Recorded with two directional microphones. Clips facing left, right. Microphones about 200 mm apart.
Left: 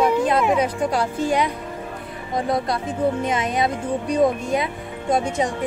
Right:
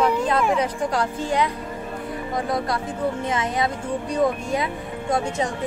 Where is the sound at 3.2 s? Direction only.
20° left (ahead or behind).